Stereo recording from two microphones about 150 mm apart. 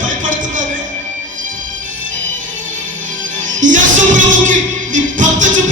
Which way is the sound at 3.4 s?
55° right (ahead or behind).